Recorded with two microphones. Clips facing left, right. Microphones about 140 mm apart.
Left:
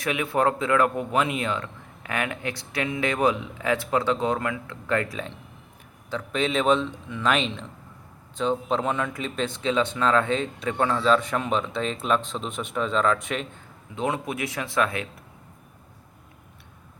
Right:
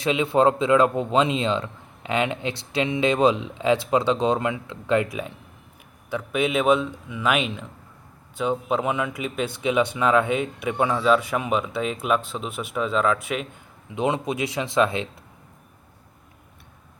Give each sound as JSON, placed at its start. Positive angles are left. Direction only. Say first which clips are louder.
{"t": 0.0, "sound": "speech", "louder": "right 4 dB", "side_deg": -20}
{"t": 13.9, "sound": "speech", "louder": "right 3 dB", "side_deg": -20}